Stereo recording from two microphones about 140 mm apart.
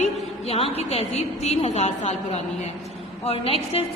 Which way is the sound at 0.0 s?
45° left (ahead or behind).